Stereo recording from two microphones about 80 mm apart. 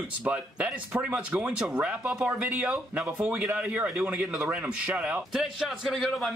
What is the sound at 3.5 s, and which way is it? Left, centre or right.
Speech, centre.